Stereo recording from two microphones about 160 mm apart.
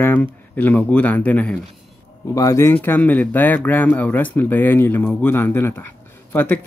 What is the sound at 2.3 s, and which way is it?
Speech, 20° left (ahead or behind).